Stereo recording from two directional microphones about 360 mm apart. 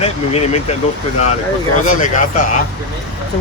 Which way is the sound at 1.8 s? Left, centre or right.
Left.